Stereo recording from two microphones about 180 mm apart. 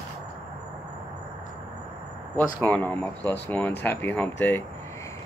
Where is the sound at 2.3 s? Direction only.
10° left (ahead or behind).